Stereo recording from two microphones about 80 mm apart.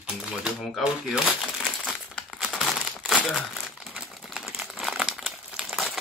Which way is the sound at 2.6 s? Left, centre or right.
Centre.